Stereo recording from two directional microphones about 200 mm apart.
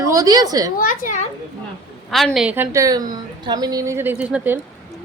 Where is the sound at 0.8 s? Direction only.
40° left (ahead or behind).